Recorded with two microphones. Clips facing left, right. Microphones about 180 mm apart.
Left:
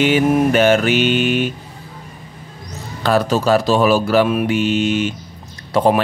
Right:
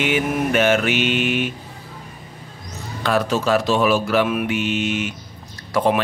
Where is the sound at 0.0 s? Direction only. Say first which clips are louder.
Left 6 dB; 35° left (ahead or behind).